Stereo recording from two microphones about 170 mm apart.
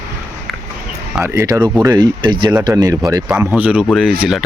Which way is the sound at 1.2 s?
15° right (ahead or behind).